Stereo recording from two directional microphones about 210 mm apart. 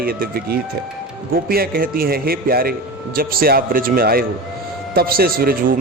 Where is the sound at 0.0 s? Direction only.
45° right (ahead or behind).